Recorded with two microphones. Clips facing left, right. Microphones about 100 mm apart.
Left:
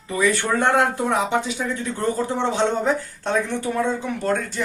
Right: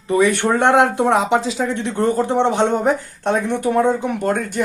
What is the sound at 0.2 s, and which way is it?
Speech, 70° right (ahead or behind).